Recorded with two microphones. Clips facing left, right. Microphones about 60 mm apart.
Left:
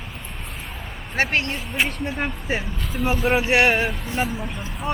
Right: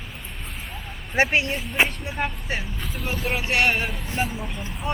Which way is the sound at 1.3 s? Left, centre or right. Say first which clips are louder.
Right 1 dB; centre.